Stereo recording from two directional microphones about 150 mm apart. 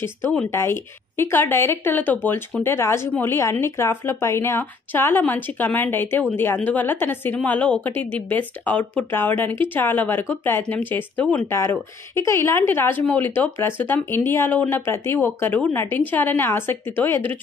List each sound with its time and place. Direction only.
0.5 s speech: 15° left (ahead or behind)